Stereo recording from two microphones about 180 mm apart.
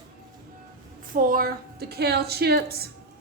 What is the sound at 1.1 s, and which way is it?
A woman's voice, 50° right (ahead or behind).